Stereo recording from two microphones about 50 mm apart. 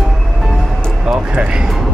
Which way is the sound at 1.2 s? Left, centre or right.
Right.